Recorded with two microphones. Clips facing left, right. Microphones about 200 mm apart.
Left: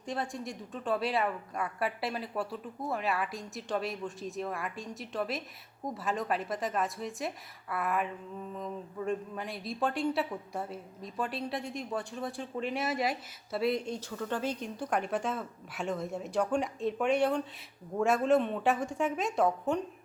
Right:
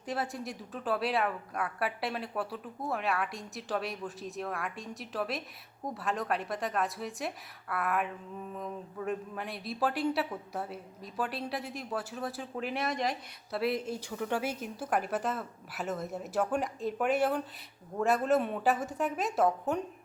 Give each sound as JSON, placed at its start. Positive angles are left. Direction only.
{"t": 0.0, "sound": "speech", "side_deg": -5}